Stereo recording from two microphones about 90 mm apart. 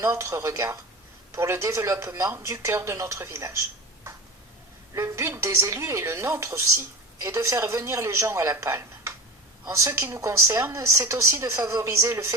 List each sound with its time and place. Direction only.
0.0 s a woman's voice: 35° right (ahead or behind)
4.9 s a woman's voice: 35° right (ahead or behind)